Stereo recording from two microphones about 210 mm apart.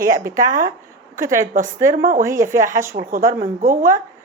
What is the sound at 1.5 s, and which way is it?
Speech, 40° right (ahead or behind).